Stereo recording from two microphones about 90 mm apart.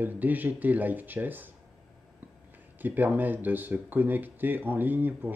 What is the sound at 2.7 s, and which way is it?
Speech, 20° right (ahead or behind).